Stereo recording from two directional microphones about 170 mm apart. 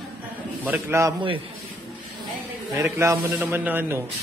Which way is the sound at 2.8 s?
15° right (ahead or behind).